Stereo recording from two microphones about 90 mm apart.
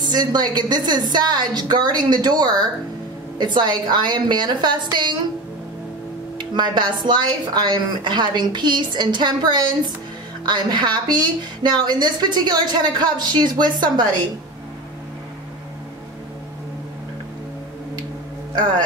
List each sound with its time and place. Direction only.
0.0 s a woman's voice: 50° right (ahead or behind)
6.5 s a woman's voice: 55° right (ahead or behind)